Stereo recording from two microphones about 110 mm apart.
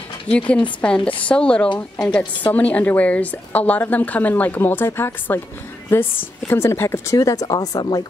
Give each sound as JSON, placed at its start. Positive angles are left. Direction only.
{"t": 0.3, "sound": "a woman's voice", "side_deg": 10}